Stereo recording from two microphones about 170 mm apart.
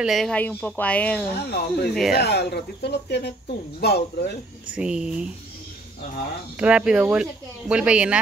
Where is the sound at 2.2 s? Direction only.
75° left (ahead or behind).